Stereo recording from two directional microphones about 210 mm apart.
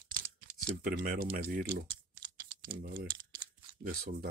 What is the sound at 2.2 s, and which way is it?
Typing, 45° right (ahead or behind).